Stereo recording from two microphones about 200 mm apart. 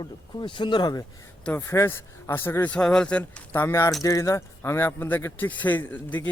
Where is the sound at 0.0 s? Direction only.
20° left (ahead or behind).